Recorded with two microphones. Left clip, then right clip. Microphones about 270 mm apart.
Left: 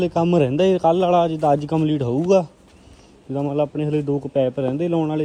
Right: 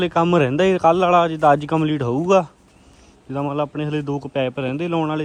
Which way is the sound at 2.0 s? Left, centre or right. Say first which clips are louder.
Even; right.